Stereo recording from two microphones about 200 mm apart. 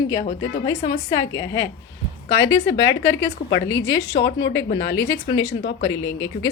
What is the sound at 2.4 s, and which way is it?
Speech, 70° left (ahead or behind).